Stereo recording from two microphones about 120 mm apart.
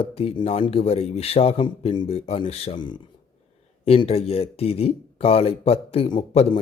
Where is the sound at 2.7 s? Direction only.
40° left (ahead or behind).